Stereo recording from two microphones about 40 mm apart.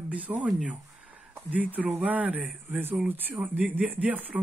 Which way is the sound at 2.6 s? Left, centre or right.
Right.